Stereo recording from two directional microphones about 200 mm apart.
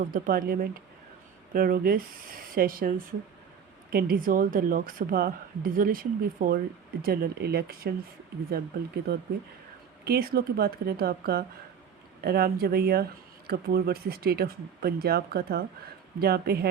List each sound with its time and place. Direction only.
0.0 s speech: 45° right (ahead or behind)
3.9 s speech: 45° right (ahead or behind)